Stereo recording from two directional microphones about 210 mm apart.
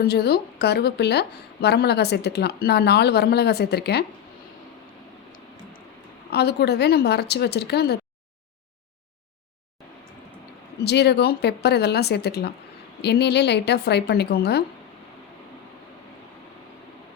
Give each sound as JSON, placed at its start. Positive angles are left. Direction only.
{"t": 0.0, "sound": "a woman's voice", "side_deg": 50}
{"t": 6.3, "sound": "a woman's voice", "side_deg": 50}
{"t": 10.8, "sound": "a woman's voice", "side_deg": 55}